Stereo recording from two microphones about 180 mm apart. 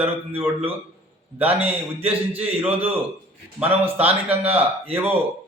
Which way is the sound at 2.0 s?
35° right (ahead or behind).